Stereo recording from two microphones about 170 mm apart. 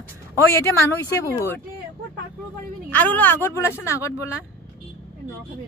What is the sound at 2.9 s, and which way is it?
Speech, 10° left (ahead or behind).